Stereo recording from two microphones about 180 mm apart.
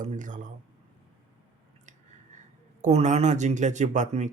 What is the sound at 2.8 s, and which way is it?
Speech, 40° right (ahead or behind).